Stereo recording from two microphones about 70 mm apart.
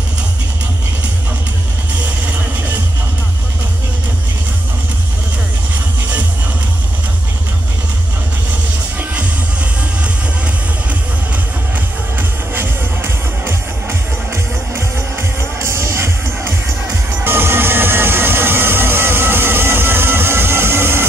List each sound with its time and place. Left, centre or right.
12.2 s music: right